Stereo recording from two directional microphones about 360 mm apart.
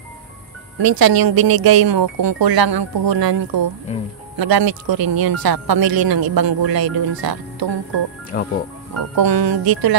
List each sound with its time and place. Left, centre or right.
0.8 s speech: right
8.3 s speech: left
9.1 s speech: right